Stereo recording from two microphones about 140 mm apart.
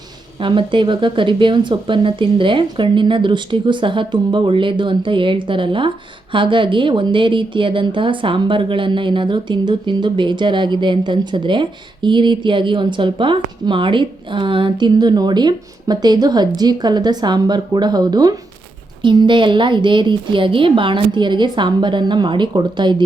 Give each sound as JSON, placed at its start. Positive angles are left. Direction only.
{"t": 0.3, "sound": "speech", "side_deg": -35}